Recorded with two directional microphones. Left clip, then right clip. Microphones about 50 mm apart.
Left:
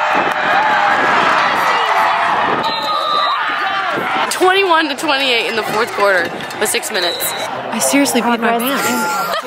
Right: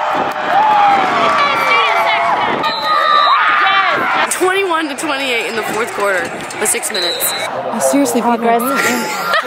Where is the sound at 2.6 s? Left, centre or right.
Right.